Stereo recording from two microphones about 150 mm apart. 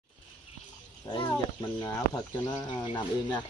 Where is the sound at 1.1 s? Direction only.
30° left (ahead or behind).